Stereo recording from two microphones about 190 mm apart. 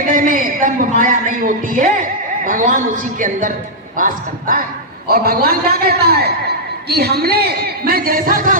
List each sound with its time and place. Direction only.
0.1 s a woman's voice: 45° right (ahead or behind)